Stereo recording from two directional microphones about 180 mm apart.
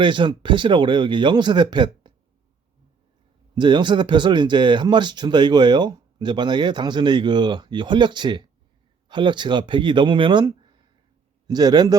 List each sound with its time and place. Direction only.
0.0 s speech: 25° right (ahead or behind)
3.5 s speech: 25° right (ahead or behind)